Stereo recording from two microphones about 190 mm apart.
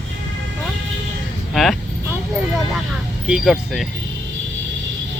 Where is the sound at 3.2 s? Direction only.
5° right (ahead or behind).